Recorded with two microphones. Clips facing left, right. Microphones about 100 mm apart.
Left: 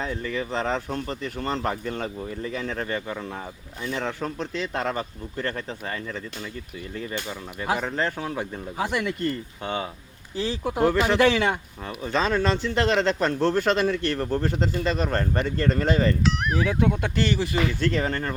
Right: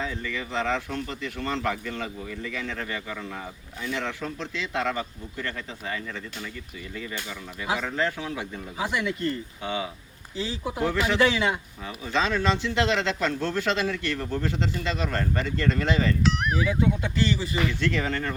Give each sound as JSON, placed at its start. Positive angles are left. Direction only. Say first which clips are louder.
{"t": 0.0, "sound": "speech", "louder": "left 3 dB", "side_deg": 40}
{"t": 10.3, "sound": "speech", "louder": "left 4 dB", "side_deg": 55}
{"t": 16.2, "sound": "speech", "louder": "left 1 dB", "side_deg": 0}
{"t": 16.6, "sound": "speech", "louder": "left 2 dB", "side_deg": 65}
{"t": 17.7, "sound": "speech", "louder": "left 2 dB", "side_deg": 40}